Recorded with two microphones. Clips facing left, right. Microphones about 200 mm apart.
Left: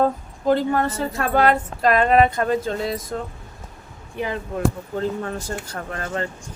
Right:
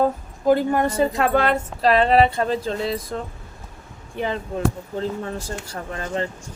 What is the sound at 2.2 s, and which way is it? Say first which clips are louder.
Speech: left 1 dB; 30° right (ahead or behind).